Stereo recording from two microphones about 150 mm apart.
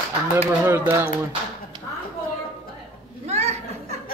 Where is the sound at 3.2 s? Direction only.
45° right (ahead or behind).